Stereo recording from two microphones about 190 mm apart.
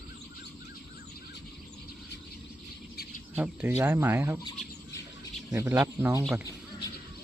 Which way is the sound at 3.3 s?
5° right (ahead or behind).